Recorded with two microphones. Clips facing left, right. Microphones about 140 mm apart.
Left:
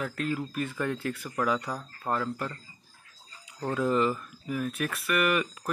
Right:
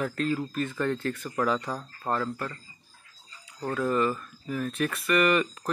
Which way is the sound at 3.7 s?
15° left (ahead or behind).